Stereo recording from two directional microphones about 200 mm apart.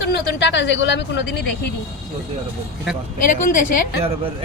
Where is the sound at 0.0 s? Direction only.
60° left (ahead or behind).